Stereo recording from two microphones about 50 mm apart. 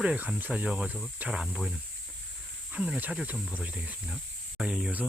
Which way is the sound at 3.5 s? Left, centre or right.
Right.